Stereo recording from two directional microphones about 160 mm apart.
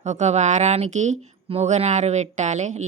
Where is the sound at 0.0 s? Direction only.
45° right (ahead or behind).